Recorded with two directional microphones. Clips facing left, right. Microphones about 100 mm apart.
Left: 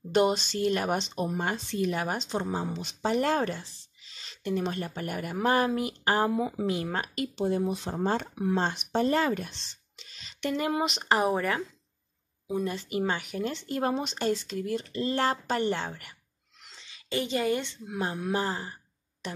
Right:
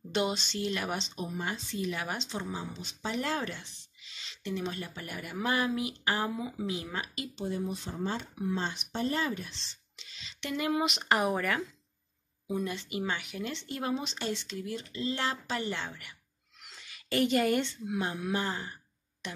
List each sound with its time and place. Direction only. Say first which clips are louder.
0.1 s speech: left 7 dB; 45° left (ahead or behind)
1.0 s speech: left 6 dB; 55° left (ahead or behind)
2.7 s speech: left 8 dB; 70° left (ahead or behind); by 7.2 s 55° left (ahead or behind)
7.3 s speech: left 6 dB; 70° left (ahead or behind)
7.9 s speech: left 6 dB; 55° left (ahead or behind); by 11.6 s 25° left (ahead or behind)
12.6 s speech: left 5 dB; 40° left (ahead or behind)
16.8 s a woman's voice: right 3 dB; 20° left (ahead or behind)
17.8 s speech: left 1 dB; 35° left (ahead or behind)